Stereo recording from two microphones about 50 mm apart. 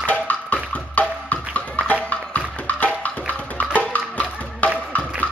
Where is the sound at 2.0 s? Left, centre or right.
Left.